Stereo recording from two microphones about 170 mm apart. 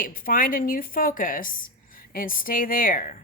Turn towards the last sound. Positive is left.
turn(degrees=55)  # may be behind; listen again after turning